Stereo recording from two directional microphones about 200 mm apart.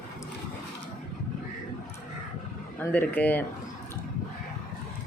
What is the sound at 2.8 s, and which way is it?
Speech, 10° left (ahead or behind).